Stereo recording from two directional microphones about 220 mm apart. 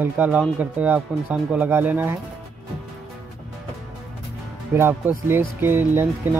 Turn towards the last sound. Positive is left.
turn(degrees=-10)  # may be behind; listen again after turning